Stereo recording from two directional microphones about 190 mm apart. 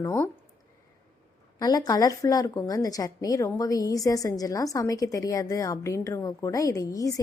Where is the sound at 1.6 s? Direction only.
20° left (ahead or behind).